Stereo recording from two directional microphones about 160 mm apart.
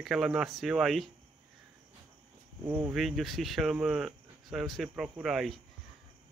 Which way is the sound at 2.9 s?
Centre (ahead or behind).